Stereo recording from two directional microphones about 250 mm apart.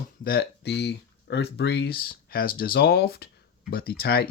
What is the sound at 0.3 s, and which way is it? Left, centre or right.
Speech, left.